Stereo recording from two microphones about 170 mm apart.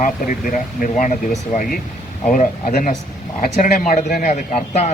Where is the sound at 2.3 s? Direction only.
50° left (ahead or behind).